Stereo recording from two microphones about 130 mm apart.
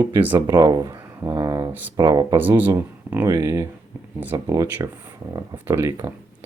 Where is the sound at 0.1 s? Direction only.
15° right (ahead or behind).